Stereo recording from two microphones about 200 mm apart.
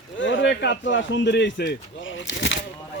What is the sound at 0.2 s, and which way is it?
A man's voice, 65° left (ahead or behind).